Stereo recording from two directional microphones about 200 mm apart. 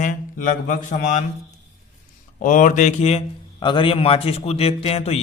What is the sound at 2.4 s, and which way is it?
A man's voice, 40° left (ahead or behind).